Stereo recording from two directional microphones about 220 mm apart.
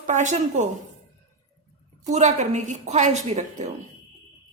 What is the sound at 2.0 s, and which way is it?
A woman's voice, 30° right (ahead or behind).